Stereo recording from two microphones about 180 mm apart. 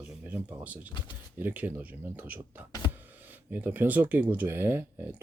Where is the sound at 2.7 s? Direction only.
25° left (ahead or behind).